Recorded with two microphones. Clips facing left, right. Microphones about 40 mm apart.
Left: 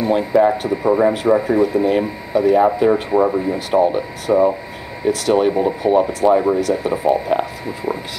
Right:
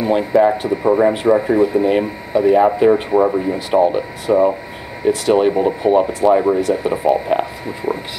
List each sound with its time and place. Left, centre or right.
0.0 s speech: centre
1.6 s speech: centre
2.9 s speech: centre
6.7 s speech: centre